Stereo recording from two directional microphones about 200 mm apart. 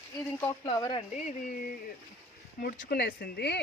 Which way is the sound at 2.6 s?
50° left (ahead or behind).